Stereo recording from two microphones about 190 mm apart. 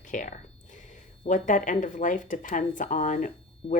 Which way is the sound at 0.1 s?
40° left (ahead or behind).